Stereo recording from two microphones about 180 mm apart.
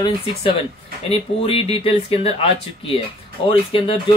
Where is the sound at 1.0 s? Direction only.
30° left (ahead or behind).